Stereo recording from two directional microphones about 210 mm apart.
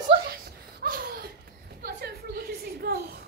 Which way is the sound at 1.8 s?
45° right (ahead or behind).